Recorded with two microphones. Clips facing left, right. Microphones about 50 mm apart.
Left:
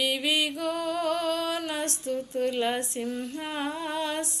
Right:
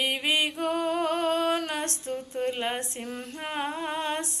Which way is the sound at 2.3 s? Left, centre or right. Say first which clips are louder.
Left 2 dB; right.